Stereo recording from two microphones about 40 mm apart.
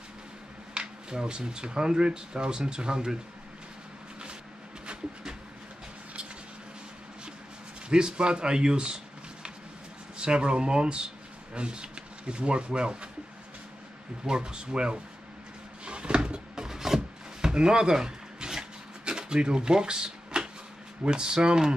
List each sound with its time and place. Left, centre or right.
0.7 s speech: right
7.9 s speech: right
10.1 s speech: right
14.2 s speech: right
15.8 s wood: right
21.0 s speech: right